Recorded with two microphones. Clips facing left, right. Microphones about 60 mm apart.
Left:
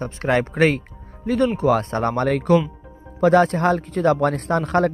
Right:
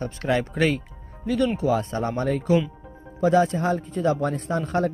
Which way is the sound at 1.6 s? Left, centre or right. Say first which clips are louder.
Left 4 dB; left.